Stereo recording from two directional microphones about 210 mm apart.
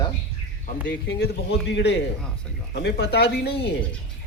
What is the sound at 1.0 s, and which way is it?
A man's voice, 50° left (ahead or behind).